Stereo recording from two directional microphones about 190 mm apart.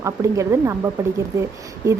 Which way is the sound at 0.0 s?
15° right (ahead or behind).